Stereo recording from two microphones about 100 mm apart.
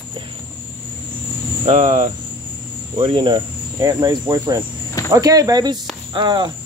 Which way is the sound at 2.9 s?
60° right (ahead or behind).